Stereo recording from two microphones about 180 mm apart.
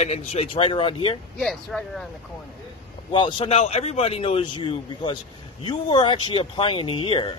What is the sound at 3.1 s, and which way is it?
A man's voice, 30° left (ahead or behind).